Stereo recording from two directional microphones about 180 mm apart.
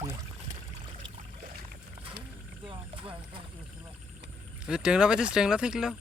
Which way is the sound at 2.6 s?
30° right (ahead or behind).